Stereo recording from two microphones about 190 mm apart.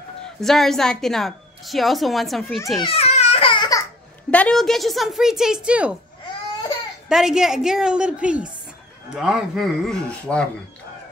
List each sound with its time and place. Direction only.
0.4 s a woman's voice: centre (ahead or behind)
2.8 s a sound: 30° left (ahead or behind)
4.3 s a woman's voice: 5° left (ahead or behind)
7.1 s a woman's voice: 5° right (ahead or behind)